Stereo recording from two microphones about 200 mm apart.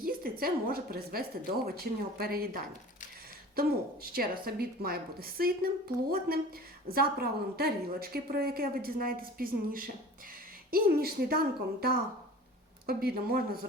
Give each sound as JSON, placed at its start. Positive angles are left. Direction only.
{"t": 0.0, "sound": "a woman's voice", "side_deg": -50}